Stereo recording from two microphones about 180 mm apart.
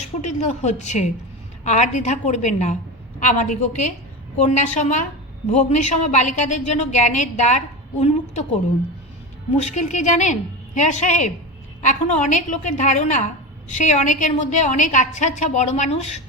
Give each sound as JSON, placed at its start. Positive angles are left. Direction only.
{"t": 0.2, "sound": "a woman's voice", "side_deg": 40}
{"t": 9.6, "sound": "a woman's voice", "side_deg": 40}